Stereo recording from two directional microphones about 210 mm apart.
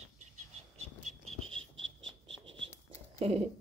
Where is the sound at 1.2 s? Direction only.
75° right (ahead or behind).